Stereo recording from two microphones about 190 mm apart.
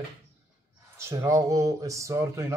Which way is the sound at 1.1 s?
15° right (ahead or behind).